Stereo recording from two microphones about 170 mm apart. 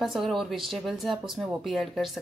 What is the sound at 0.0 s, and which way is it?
Speech, centre (ahead or behind).